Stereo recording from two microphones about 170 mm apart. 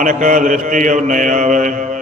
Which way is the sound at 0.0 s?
50° right (ahead or behind).